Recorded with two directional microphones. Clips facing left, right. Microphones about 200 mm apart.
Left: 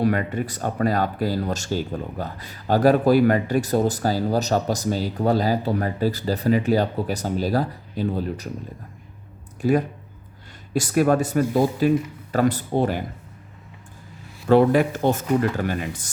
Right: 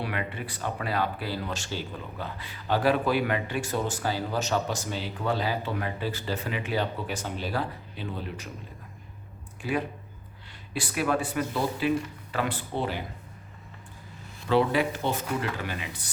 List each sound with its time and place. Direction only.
0.0 s speech: 45° left (ahead or behind)
9.6 s speech: 40° left (ahead or behind)
14.4 s speech: 50° left (ahead or behind)